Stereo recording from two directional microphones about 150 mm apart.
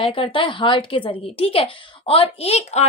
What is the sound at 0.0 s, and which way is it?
A woman's voice, 35° left (ahead or behind).